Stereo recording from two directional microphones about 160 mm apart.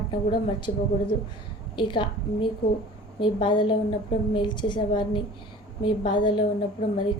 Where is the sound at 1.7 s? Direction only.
30° left (ahead or behind).